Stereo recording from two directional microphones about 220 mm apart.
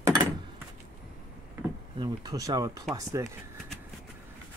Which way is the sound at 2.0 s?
20° right (ahead or behind).